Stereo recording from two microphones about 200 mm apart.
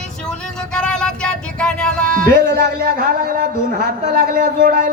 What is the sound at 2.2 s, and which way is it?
A man's voice, 50° right (ahead or behind).